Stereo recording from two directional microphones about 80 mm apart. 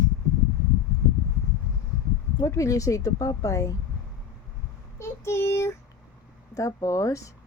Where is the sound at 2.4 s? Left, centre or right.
Left.